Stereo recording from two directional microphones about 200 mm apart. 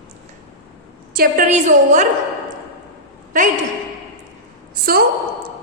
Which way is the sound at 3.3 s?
40° right (ahead or behind).